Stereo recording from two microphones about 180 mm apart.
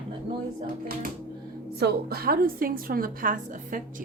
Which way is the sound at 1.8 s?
55° right (ahead or behind).